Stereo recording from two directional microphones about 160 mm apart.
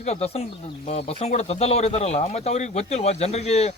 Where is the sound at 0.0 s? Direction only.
40° left (ahead or behind).